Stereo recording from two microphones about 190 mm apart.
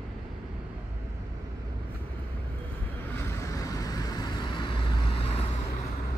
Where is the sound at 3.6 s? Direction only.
20° left (ahead or behind).